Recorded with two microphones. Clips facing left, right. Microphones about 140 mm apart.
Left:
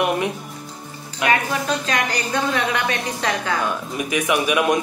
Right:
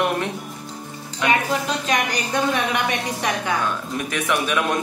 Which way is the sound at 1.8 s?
20° right (ahead or behind).